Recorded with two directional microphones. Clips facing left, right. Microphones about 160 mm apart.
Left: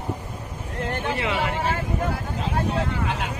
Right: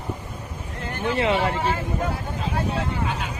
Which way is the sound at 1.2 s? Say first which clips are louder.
Right 7 dB; 30° right (ahead or behind).